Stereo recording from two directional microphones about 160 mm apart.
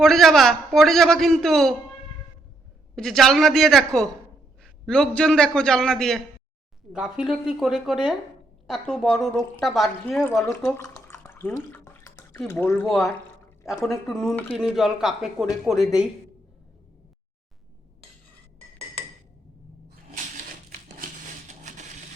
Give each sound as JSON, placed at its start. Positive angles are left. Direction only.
{"t": 0.0, "sound": "a man's voice", "side_deg": 0}
{"t": 2.9, "sound": "a man's voice", "side_deg": 0}
{"t": 10.8, "sound": "drip", "side_deg": 20}
{"t": 12.5, "sound": "speech", "side_deg": 15}
{"t": 13.8, "sound": "a man's voice", "side_deg": 0}
{"t": 21.4, "sound": "a sound", "side_deg": -50}